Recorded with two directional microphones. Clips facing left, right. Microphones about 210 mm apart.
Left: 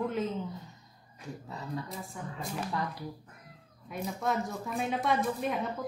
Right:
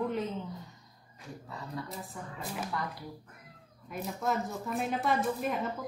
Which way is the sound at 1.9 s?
Centre (ahead or behind).